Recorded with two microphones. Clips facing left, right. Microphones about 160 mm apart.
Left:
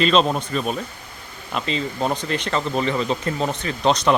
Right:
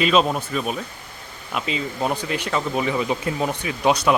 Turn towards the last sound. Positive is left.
turn(degrees=-10)  # may be behind; listen again after turning